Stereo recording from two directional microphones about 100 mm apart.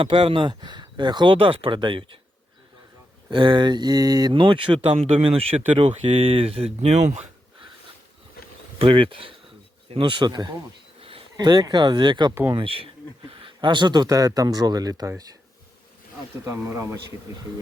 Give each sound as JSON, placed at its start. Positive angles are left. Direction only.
{"t": 0.0, "sound": "speech", "side_deg": -60}
{"t": 3.2, "sound": "speech", "side_deg": -50}
{"t": 8.8, "sound": "speech", "side_deg": -65}
{"t": 12.3, "sound": "speech", "side_deg": -25}
{"t": 12.5, "sound": "speech", "side_deg": -65}
{"t": 16.5, "sound": "speech", "side_deg": -30}